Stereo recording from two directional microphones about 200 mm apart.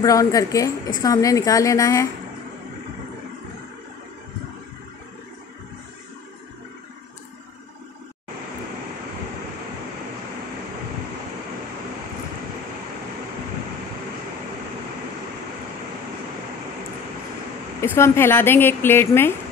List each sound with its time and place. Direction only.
0.0 s speech: 15° left (ahead or behind)
17.7 s speech: 15° left (ahead or behind)